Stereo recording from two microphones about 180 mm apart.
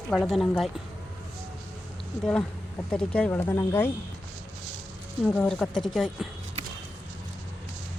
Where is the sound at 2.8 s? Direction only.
5° left (ahead or behind).